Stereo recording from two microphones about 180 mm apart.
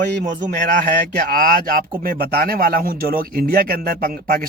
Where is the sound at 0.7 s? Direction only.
50° right (ahead or behind).